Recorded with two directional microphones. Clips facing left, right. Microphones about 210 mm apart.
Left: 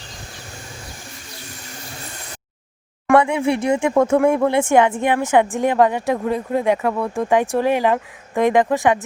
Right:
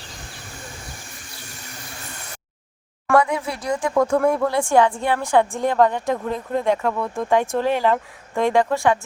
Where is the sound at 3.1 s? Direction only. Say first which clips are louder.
Left 4 dB; 25° left (ahead or behind).